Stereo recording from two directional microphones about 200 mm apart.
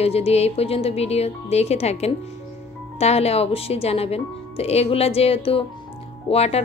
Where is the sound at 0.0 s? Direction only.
30° left (ahead or behind).